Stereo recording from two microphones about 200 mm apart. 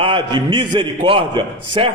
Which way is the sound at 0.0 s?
25° right (ahead or behind).